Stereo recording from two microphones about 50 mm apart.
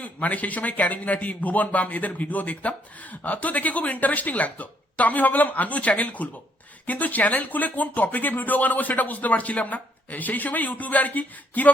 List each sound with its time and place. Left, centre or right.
0.0 s a man's voice: left